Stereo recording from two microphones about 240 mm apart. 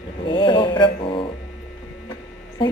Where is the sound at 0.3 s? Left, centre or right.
Centre.